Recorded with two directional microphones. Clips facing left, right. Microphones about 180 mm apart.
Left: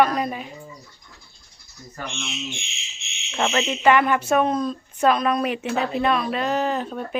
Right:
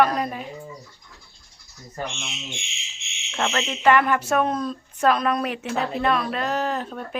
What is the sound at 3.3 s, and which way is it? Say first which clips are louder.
Speech: left 3 dB; 10° left (ahead or behind).